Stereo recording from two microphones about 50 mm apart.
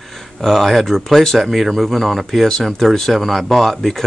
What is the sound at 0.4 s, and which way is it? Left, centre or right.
Speech, centre.